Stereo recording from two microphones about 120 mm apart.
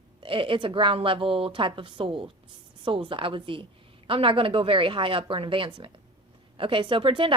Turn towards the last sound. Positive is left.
turn(degrees=-45)  # may be behind; listen again after turning